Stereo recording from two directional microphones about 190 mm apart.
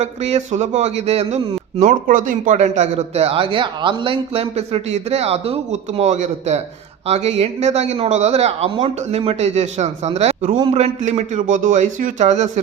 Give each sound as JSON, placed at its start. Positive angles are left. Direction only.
{"t": 0.0, "sound": "a man's voice", "side_deg": -35}
{"t": 1.8, "sound": "a man's voice", "side_deg": -45}